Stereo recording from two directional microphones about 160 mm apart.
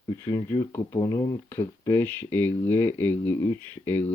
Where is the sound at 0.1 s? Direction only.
20° left (ahead or behind).